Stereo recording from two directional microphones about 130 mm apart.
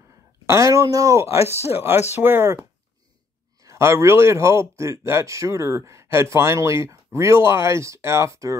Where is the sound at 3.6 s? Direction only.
20° right (ahead or behind).